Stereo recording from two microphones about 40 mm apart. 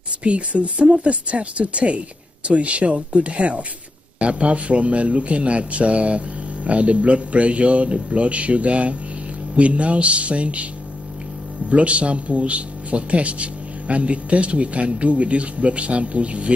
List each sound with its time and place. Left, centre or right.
0.2 s a man's voice: right
11.7 s a man's voice: right